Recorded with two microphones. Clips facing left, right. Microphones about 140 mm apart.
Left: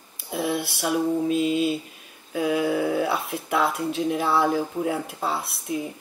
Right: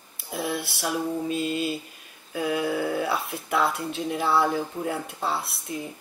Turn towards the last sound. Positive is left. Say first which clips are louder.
# left 5 dB
turn(degrees=0)  # may be behind; listen again after turning